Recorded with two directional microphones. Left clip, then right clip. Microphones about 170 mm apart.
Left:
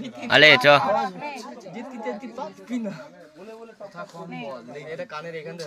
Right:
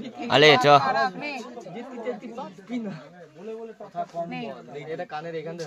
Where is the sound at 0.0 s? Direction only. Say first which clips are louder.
Left 2 dB; 25° right (ahead or behind).